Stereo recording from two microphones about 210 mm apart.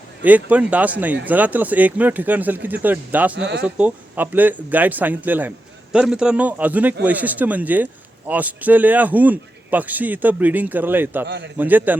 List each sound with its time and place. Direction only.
0.3 s speech: 5° right (ahead or behind)
3.3 s speech: 50° right (ahead or behind)
3.6 s speech: 5° right (ahead or behind)
11.3 s a man's voice: 55° right (ahead or behind)
11.5 s speech: 10° right (ahead or behind)